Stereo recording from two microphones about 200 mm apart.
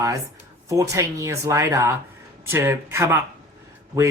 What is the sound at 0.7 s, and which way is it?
Speech, 15° right (ahead or behind).